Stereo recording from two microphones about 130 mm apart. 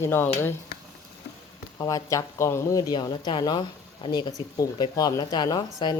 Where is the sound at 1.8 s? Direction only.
25° left (ahead or behind).